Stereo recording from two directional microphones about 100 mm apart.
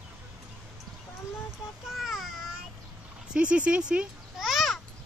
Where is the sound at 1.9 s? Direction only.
Centre (ahead or behind).